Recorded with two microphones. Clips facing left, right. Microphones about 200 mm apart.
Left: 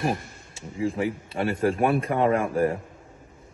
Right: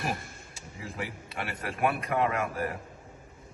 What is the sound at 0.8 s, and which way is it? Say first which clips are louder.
A man's voice: left 12 dB; 30° left (ahead or behind).